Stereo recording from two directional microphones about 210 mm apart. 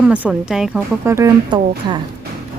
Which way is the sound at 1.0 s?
15° right (ahead or behind).